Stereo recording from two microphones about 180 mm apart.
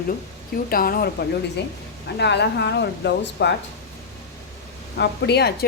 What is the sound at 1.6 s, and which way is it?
Speech, 70° left (ahead or behind).